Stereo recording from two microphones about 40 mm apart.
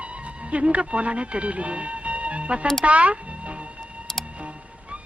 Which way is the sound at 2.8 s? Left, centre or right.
Right.